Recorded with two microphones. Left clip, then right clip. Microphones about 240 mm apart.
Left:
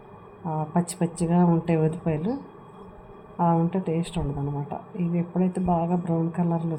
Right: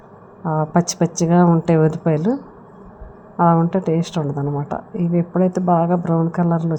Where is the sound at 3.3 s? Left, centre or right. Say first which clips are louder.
Right 8 dB; right.